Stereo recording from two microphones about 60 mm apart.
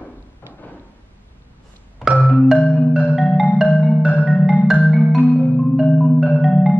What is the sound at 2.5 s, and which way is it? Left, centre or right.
Marimba, left.